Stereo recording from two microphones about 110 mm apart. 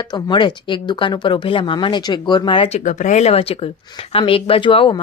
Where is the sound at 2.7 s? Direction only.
90° left; by 5.0 s 50° left (ahead or behind).